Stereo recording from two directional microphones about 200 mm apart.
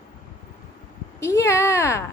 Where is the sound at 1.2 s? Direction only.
15° left (ahead or behind).